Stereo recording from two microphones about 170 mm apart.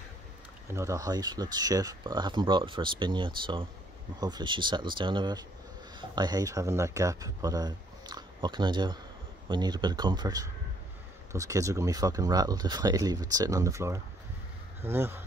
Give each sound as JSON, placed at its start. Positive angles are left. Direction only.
{"t": 0.7, "sound": "speech", "side_deg": -20}